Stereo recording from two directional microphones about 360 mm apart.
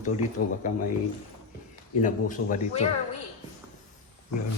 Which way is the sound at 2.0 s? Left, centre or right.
Left.